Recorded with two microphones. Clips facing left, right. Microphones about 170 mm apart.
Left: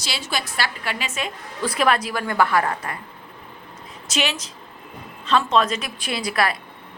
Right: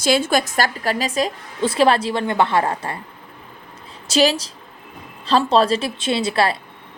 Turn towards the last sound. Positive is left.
turn(degrees=-30)  # may be behind; listen again after turning